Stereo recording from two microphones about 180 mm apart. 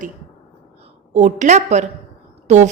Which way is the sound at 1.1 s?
45° right (ahead or behind).